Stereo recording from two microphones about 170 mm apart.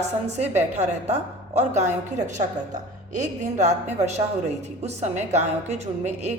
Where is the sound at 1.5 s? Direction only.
40° right (ahead or behind).